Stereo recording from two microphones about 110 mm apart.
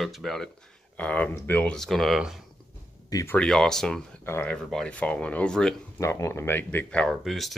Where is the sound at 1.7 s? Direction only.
5° left (ahead or behind).